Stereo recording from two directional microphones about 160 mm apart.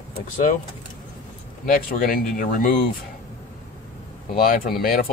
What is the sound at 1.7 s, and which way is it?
Speech, 60° left (ahead or behind).